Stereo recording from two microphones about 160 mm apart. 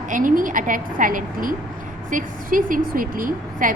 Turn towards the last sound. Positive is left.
turn(degrees=-60)  # may be behind; listen again after turning